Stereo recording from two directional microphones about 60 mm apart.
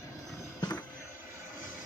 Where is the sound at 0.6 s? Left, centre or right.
Left.